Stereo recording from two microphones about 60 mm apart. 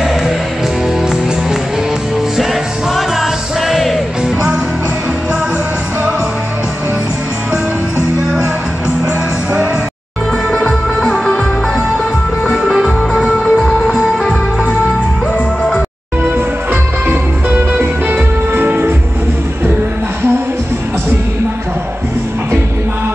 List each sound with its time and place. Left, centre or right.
3.2 s music: centre
10.5 s music: centre
12.4 s music: centre
18.5 s music: right